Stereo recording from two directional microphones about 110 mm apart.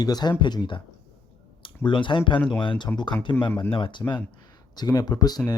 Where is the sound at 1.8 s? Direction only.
50° left (ahead or behind).